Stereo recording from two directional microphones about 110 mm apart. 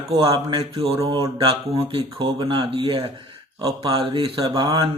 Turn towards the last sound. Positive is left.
turn(degrees=-45)  # may be behind; listen again after turning